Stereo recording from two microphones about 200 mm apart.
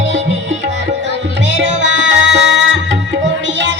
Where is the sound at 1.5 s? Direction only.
65° right (ahead or behind).